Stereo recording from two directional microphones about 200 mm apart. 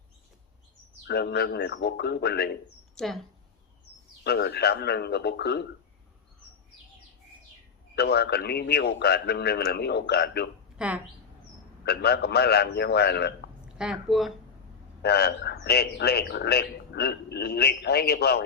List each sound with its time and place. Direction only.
1.0 s a man's voice: 55° left (ahead or behind)
2.9 s speech: centre (ahead or behind)
4.2 s a man's voice: 55° left (ahead or behind)
7.9 s a man's voice: 55° left (ahead or behind)
10.8 s speech: 5° right (ahead or behind)
11.9 s a man's voice: 55° left (ahead or behind)
13.7 s speech: 5° right (ahead or behind)
15.0 s a man's voice: 55° left (ahead or behind)